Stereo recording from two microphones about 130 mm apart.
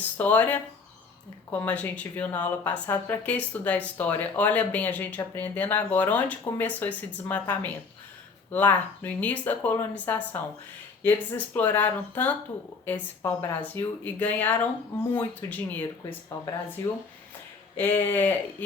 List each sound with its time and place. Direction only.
0.2 s speech: 15° left (ahead or behind)
17.7 s speech: 15° left (ahead or behind)